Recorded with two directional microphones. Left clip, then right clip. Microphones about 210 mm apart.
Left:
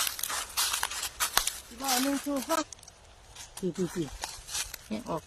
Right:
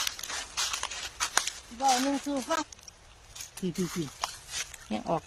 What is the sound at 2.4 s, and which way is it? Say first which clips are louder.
Speech: left 1 dB; 55° left (ahead or behind).